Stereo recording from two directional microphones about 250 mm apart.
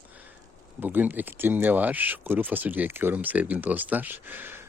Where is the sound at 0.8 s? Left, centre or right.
Centre.